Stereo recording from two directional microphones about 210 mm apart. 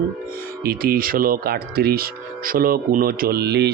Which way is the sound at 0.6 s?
45° right (ahead or behind).